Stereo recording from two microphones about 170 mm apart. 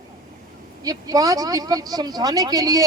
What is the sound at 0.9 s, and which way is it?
A man's voice, 20° right (ahead or behind).